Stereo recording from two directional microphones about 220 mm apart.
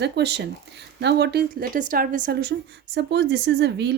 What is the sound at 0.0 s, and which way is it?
A woman's voice, 50° right (ahead or behind).